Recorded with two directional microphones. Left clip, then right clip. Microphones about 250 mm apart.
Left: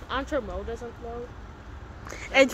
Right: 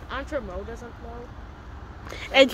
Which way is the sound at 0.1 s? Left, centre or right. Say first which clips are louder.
Left 2 dB; left.